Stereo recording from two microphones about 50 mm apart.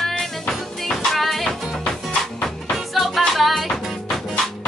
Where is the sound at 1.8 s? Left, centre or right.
Centre.